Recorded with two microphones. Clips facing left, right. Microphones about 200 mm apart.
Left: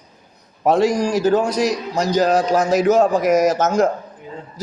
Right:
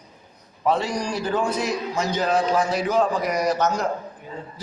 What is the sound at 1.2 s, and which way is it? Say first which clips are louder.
A man's voice: left 6 dB; 40° left (ahead or behind).